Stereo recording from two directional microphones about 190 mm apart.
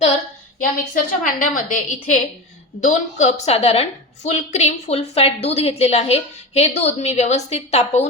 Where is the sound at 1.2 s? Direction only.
45° left (ahead or behind).